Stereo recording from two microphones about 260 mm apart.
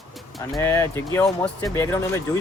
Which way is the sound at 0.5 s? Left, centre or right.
Centre.